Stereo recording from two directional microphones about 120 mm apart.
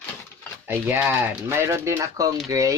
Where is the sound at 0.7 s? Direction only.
20° right (ahead or behind).